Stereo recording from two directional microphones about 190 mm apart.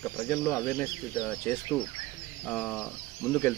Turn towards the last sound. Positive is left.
turn(degrees=10)  # may be behind; listen again after turning